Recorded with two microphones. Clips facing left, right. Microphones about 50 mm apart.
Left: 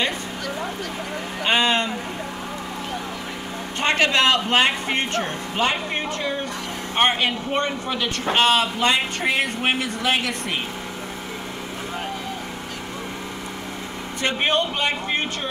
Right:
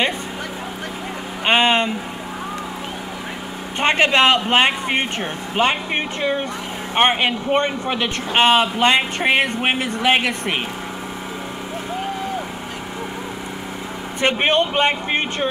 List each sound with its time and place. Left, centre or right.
1.4 s speech: right
3.8 s speech: right
14.2 s speech: right